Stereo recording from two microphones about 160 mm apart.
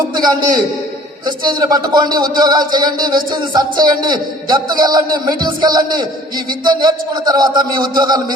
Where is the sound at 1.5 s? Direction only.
25° right (ahead or behind).